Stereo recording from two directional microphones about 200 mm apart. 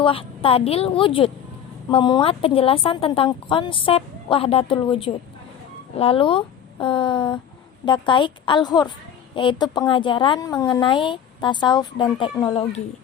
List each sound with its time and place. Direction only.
0.0 s a woman's voice: 25° left (ahead or behind)